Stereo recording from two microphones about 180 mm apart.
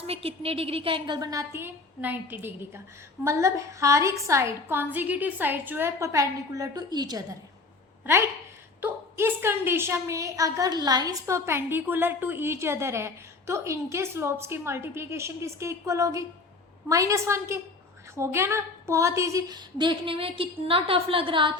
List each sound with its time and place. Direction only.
0.1 s a woman's voice: 30° right (ahead or behind)
8.8 s a woman's voice: 15° right (ahead or behind)